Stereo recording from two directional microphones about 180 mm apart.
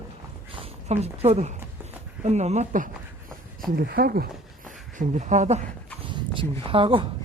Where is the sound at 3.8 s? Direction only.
55° right (ahead or behind); by 5.6 s 40° right (ahead or behind).